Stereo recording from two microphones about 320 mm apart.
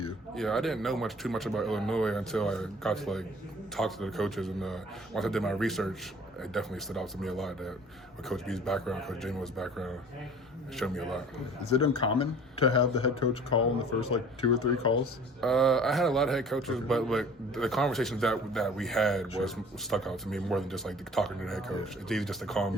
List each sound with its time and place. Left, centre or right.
0.3 s speech: centre
11.6 s speech: centre
15.4 s speech: centre